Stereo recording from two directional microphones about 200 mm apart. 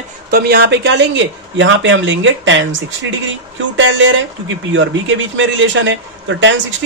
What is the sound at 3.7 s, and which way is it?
A man's voice, 70° right (ahead or behind).